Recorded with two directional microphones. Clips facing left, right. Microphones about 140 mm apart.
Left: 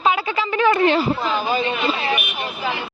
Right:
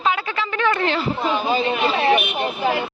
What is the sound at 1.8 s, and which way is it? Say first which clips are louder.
Speech: right 4 dB; 60° right (ahead or behind).